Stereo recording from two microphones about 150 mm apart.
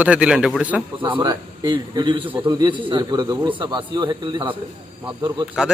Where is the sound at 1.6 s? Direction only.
30° right (ahead or behind).